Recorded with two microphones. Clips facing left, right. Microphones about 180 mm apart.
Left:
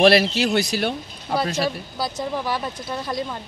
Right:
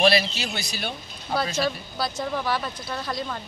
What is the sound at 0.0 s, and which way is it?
Speech, 75° left (ahead or behind).